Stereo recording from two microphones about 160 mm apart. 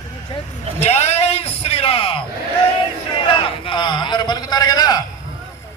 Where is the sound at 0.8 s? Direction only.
40° left (ahead or behind).